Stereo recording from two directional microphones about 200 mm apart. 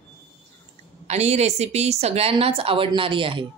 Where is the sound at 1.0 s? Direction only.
35° right (ahead or behind).